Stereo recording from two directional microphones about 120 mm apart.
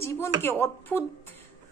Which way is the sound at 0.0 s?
20° left (ahead or behind).